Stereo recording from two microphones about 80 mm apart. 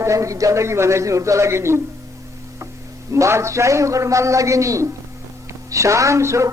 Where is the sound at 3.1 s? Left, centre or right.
Right.